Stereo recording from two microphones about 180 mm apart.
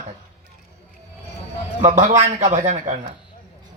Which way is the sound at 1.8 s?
40° right (ahead or behind).